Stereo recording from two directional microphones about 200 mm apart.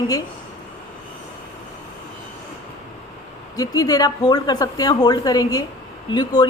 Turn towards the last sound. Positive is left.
turn(degrees=20)  # may be behind; listen again after turning